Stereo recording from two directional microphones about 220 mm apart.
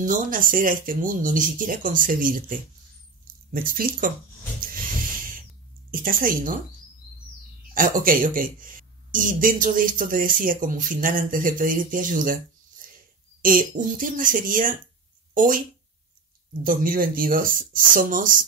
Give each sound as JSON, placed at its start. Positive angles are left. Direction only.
{"t": 0.0, "sound": "speech", "side_deg": -35}
{"t": 5.9, "sound": "speech", "side_deg": -40}
{"t": 7.7, "sound": "speech", "side_deg": -40}
{"t": 12.8, "sound": "a sound", "side_deg": -40}
{"t": 13.4, "sound": "speech", "side_deg": -40}
{"t": 16.6, "sound": "speech", "side_deg": -40}